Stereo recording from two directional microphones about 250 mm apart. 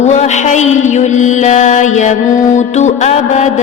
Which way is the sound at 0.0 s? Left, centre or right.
Left.